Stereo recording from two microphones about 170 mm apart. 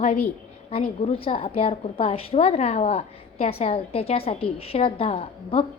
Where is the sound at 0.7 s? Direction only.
35° left (ahead or behind).